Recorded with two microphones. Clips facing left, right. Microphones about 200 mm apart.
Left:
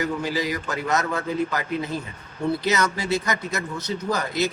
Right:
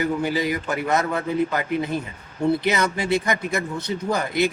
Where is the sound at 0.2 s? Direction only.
25° right (ahead or behind).